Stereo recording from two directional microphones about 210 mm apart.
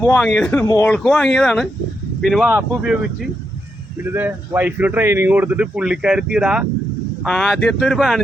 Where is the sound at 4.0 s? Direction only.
10° right (ahead or behind).